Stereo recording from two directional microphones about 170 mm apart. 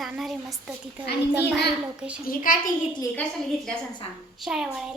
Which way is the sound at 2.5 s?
55° left (ahead or behind).